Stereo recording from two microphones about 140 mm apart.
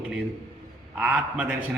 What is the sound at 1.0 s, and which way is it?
Speech, 5° right (ahead or behind).